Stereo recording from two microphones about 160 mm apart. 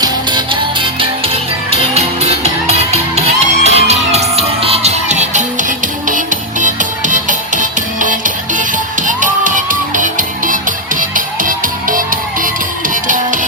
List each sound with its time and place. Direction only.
0.0 s music: 30° right (ahead or behind); by 13.4 s 55° right (ahead or behind)